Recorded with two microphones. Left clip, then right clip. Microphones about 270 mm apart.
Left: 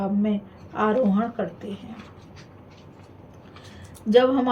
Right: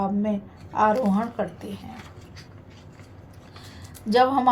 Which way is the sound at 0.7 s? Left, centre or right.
Right.